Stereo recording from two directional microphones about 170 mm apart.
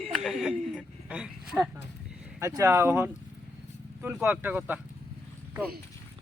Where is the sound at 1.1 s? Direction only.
5° right (ahead or behind).